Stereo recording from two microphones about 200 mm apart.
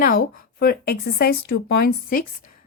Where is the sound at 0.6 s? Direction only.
50° left (ahead or behind).